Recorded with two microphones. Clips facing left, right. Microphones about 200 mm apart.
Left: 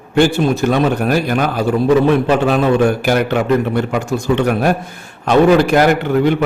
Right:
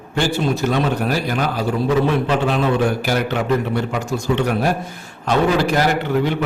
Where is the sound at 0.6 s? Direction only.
55° left (ahead or behind).